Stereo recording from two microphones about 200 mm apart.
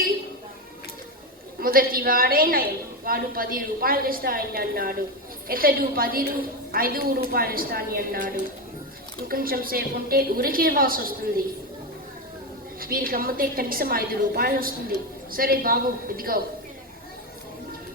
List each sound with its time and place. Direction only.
1.6 s a woman's voice: 45° right (ahead or behind)
9.3 s a woman's voice: 45° right (ahead or behind)
12.8 s a woman's voice: 45° right (ahead or behind)